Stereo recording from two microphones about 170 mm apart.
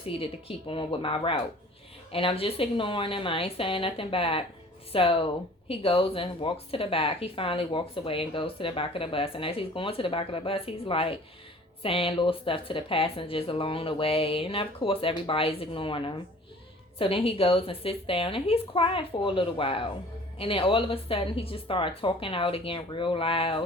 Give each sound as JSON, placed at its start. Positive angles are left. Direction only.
{"t": 0.0, "sound": "speech", "side_deg": 35}